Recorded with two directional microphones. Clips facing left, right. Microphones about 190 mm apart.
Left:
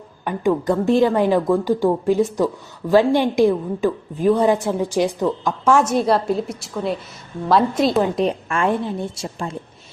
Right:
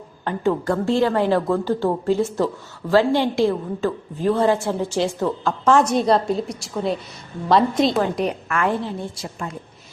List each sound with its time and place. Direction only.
0.3 s a woman's voice: 15° left (ahead or behind)
8.0 s a woman's voice: 25° left (ahead or behind)